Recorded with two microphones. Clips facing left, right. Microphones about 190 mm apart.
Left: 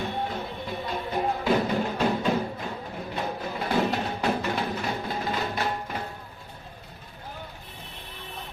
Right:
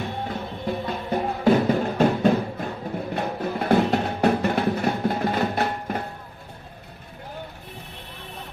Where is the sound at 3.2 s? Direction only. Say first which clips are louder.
Right 3 dB; 55° right (ahead or behind).